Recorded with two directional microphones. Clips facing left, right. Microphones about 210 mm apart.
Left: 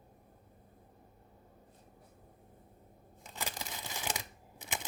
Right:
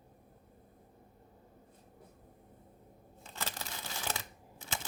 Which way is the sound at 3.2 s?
15° left (ahead or behind).